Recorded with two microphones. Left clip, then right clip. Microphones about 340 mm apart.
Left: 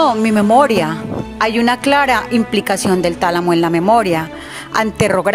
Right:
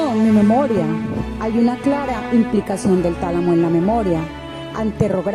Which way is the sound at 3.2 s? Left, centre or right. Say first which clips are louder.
Left 5 dB; left.